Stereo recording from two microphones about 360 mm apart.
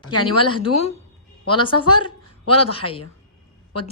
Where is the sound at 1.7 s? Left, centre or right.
Left.